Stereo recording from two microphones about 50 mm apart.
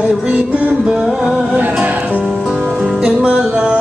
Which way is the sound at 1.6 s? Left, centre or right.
Right.